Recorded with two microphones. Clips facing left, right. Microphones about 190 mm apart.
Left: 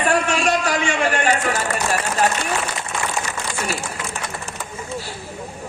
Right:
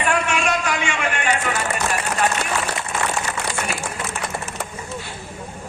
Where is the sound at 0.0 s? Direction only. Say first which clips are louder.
Left 2 dB; 35° left (ahead or behind).